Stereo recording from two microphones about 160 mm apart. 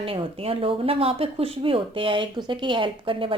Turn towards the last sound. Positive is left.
turn(degrees=-30)  # may be behind; listen again after turning